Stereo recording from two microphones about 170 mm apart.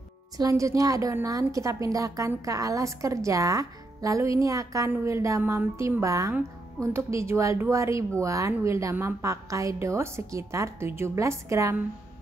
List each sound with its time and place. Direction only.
0.4 s a woman's voice: 20° right (ahead or behind)